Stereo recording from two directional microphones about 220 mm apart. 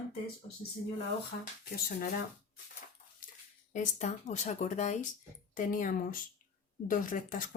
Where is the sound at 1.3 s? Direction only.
40° left (ahead or behind).